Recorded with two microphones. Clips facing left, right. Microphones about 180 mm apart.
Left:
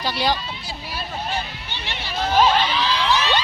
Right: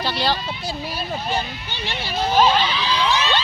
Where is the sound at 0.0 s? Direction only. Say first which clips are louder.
Even; 10° left (ahead or behind).